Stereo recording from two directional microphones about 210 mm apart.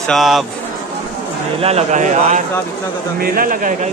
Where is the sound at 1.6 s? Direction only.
30° right (ahead or behind).